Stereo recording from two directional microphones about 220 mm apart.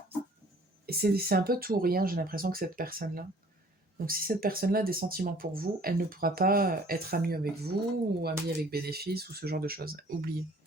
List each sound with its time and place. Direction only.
0.9 s speech: 45° right (ahead or behind)